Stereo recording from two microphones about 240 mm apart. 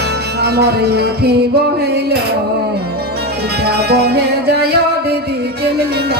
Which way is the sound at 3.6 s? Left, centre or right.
Right.